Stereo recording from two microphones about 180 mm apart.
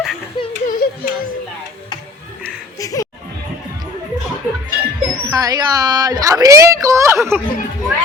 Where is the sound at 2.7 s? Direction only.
20° left (ahead or behind).